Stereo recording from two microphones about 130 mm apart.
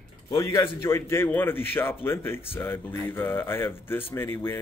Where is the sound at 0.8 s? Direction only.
20° left (ahead or behind).